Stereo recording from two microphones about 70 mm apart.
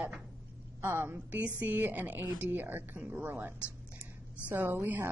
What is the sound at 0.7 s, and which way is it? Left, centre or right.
Speech, right.